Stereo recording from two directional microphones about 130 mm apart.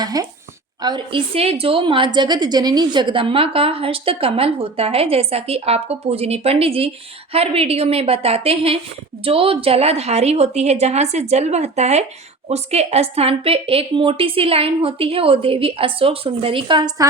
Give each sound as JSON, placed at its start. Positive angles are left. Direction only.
{"t": 0.0, "sound": "a woman's voice", "side_deg": -30}